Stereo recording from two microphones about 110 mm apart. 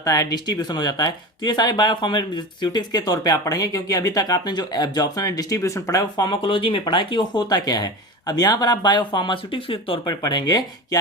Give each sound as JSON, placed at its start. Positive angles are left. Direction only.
{"t": 0.0, "sound": "speech", "side_deg": 30}
{"t": 6.4, "sound": "speech", "side_deg": 55}